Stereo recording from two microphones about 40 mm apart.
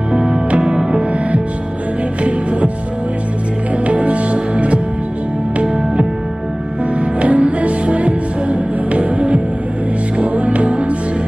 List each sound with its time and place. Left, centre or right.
0.1 s music: right
3.8 s music: right
7.2 s music: right